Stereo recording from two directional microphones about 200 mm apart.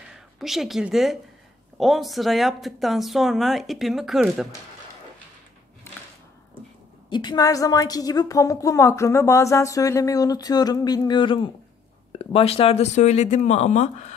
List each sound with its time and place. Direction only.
0.4 s speech: centre (ahead or behind)
5.9 s a sound: 10° left (ahead or behind)
7.1 s a woman's voice: 20° left (ahead or behind)